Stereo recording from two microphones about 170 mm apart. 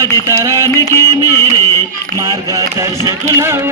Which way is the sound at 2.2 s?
20° right (ahead or behind).